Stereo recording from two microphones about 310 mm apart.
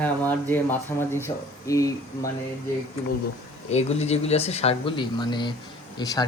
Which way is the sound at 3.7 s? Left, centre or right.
Left.